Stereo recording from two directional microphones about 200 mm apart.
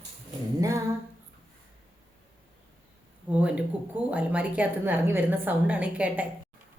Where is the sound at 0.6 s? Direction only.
15° right (ahead or behind).